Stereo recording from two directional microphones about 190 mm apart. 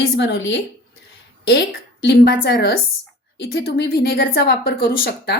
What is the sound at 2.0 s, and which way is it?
A woman's voice, 60° left (ahead or behind).